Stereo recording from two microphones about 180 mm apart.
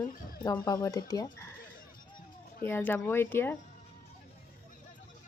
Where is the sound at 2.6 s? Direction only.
10° left (ahead or behind).